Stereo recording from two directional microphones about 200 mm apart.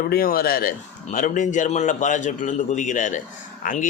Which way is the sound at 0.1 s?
50° left (ahead or behind).